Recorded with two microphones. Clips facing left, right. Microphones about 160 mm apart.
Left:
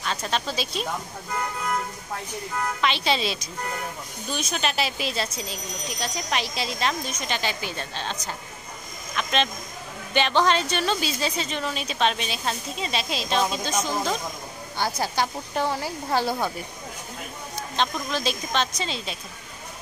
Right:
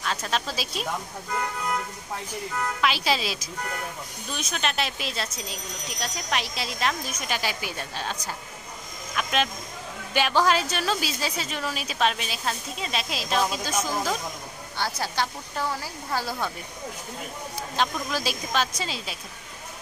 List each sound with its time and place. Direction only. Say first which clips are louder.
0.0 s speech: left 1 dB; centre (ahead or behind)
2.8 s speech: left 1 dB; 5° right (ahead or behind)
14.8 s speech: left 3 dB; 15° left (ahead or behind)
17.7 s speech: left 1 dB; 5° right (ahead or behind)